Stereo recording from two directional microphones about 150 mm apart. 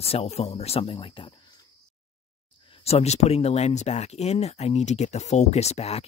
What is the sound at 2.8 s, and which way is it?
Speech, 45° left (ahead or behind).